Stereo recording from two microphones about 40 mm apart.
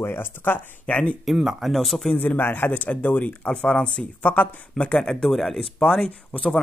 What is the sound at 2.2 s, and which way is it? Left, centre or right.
Speech, left.